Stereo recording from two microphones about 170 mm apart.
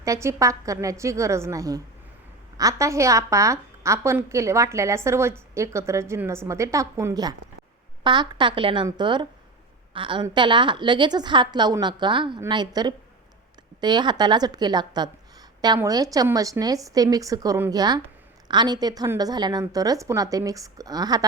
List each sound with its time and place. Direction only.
0.0 s a woman's voice: 20° right (ahead or behind)